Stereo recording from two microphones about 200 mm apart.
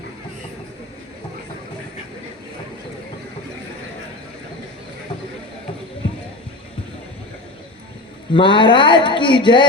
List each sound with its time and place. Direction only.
8.3 s a woman's voice: 25° left (ahead or behind)